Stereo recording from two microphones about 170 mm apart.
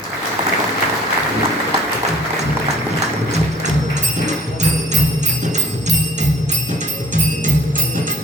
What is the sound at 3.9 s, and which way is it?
Music, 45° right (ahead or behind).